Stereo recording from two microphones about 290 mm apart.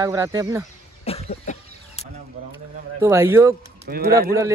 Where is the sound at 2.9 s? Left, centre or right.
Centre.